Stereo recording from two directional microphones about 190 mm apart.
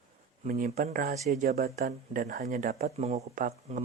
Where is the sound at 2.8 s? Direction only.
35° right (ahead or behind).